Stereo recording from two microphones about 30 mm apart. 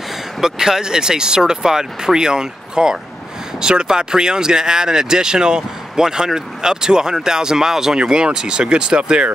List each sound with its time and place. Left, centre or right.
0.4 s speech: centre
8.1 s speech: right